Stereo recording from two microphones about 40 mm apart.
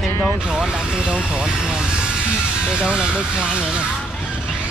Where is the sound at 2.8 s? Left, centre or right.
Right.